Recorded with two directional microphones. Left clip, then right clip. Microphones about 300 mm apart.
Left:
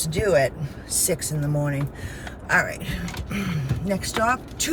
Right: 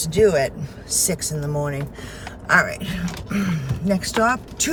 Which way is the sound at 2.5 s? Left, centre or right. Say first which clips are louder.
Right 3 dB; centre.